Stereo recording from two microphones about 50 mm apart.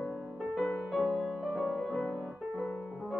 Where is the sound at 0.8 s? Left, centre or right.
Centre.